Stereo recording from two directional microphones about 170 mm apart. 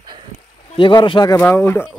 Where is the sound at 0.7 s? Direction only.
30° left (ahead or behind).